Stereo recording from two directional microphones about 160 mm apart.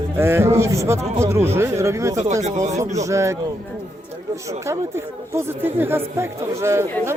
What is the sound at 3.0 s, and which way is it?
Speech, 20° right (ahead or behind).